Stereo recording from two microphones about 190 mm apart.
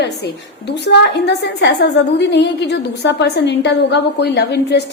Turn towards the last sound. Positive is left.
turn(degrees=60)  # may be behind; listen again after turning